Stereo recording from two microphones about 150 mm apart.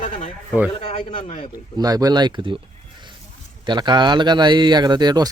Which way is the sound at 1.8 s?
25° right (ahead or behind).